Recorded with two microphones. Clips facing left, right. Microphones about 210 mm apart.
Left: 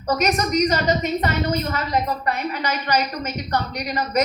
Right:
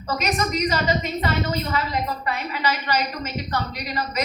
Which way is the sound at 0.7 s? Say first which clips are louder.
Left 3 dB; 45° left (ahead or behind).